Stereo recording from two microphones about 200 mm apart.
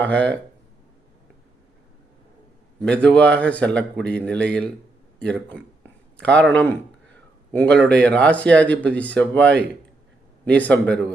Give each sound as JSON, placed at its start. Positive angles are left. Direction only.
{"t": 0.0, "sound": "a man's voice", "side_deg": 5}
{"t": 2.8, "sound": "a man's voice", "side_deg": 5}